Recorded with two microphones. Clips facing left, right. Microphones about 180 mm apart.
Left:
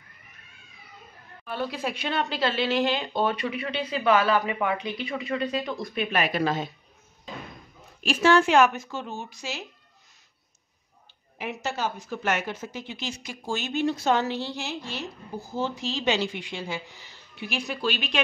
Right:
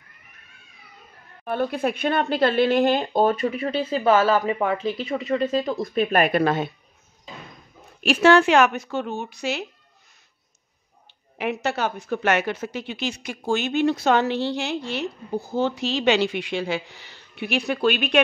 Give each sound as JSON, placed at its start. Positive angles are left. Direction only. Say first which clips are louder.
{"t": 1.4, "sound": "a woman's voice", "louder": "right 7 dB", "side_deg": -55}
{"t": 6.2, "sound": "a woman's voice", "louder": "right 5 dB", "side_deg": -55}
{"t": 8.0, "sound": "a woman's voice", "louder": "right 4 dB", "side_deg": -70}
{"t": 11.3, "sound": "a woman's voice", "louder": "right 6 dB", "side_deg": -65}